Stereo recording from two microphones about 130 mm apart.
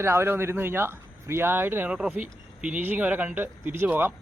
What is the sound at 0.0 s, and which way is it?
Speech, 20° right (ahead or behind).